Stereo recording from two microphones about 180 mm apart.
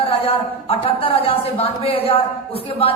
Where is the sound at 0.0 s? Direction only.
30° left (ahead or behind).